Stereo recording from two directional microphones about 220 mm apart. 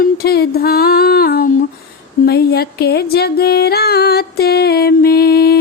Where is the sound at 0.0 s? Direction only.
45° left (ahead or behind).